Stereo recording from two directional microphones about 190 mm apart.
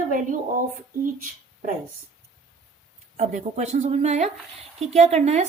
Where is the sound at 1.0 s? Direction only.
45° right (ahead or behind).